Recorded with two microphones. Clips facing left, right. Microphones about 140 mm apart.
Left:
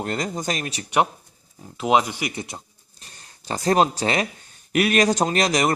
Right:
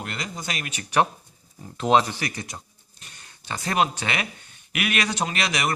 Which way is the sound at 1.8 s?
10° left (ahead or behind).